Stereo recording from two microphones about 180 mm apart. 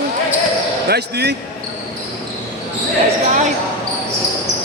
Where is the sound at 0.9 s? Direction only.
70° right (ahead or behind).